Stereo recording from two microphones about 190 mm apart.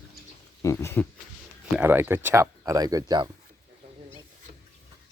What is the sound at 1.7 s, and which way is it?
Speech, 10° right (ahead or behind).